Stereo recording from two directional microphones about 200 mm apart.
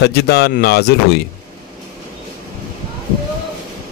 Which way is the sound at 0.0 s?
55° left (ahead or behind).